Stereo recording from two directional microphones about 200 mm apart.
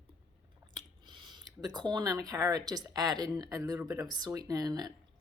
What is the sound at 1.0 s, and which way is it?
Speech, 20° right (ahead or behind).